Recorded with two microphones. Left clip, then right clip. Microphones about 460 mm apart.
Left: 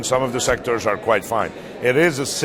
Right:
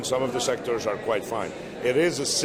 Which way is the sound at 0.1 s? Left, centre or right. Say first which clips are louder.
Left 6 dB; left.